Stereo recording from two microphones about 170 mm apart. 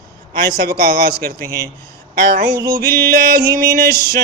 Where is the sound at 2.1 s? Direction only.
60° right (ahead or behind).